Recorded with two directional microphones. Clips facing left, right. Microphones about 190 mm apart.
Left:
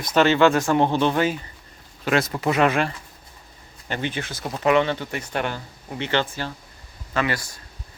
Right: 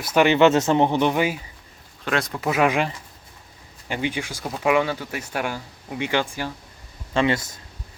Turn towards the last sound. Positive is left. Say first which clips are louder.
# right 4 dB
turn(degrees=-25)  # may be behind; listen again after turning